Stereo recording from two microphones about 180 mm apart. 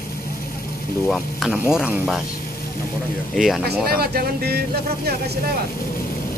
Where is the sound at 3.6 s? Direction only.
60° right (ahead or behind).